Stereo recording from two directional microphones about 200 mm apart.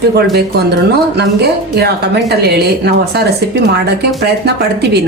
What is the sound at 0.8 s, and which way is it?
A woman's voice, 55° right (ahead or behind).